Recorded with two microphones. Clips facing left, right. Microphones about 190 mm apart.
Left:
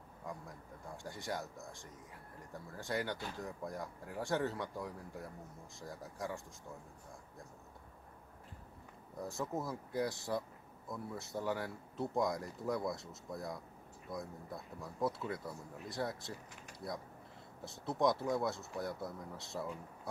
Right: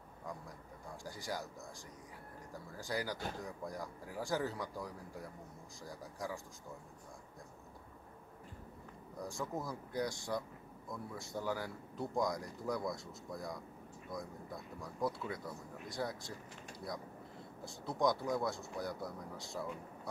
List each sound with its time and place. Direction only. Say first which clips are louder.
1.0 s speech: left 1 dB; centre (ahead or behind)
2.5 s speech: left 1 dB; centre (ahead or behind)
9.2 s speech: left 2 dB; 5° left (ahead or behind)
17.6 s speech: left 1 dB; centre (ahead or behind)